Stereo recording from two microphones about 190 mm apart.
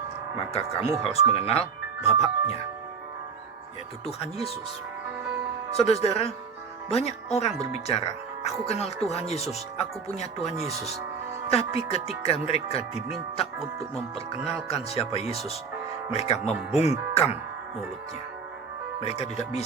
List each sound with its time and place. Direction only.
0.3 s speech: 30° left (ahead or behind)
4.0 s speech: 30° left (ahead or behind)
5.7 s speech: 30° left (ahead or behind)
11.5 s speech: 30° left (ahead or behind)
14.7 s speech: 30° left (ahead or behind)
19.0 s speech: 35° left (ahead or behind)